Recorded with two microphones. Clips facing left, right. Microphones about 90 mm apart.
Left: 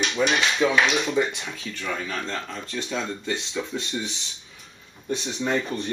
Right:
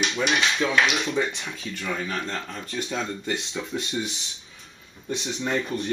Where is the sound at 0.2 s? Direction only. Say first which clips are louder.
Left 2 dB; 5° right (ahead or behind).